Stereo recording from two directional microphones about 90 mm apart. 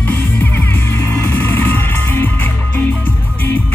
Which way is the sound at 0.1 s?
20° left (ahead or behind).